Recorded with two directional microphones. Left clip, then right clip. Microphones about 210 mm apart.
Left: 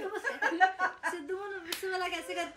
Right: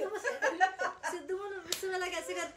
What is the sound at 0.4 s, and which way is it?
Chuckle, 35° left (ahead or behind).